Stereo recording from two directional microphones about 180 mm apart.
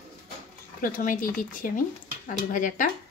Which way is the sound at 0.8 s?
50° left (ahead or behind).